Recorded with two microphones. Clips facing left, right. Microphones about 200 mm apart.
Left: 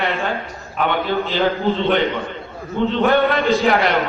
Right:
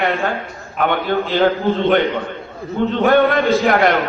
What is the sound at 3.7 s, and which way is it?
Speech, 50° right (ahead or behind).